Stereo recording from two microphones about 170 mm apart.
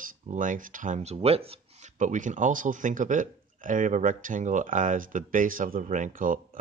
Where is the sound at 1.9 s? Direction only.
50° right (ahead or behind).